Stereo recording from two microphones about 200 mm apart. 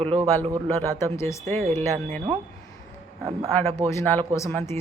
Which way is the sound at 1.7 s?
10° left (ahead or behind).